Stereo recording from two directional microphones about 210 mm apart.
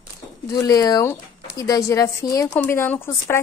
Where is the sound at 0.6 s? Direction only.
20° left (ahead or behind).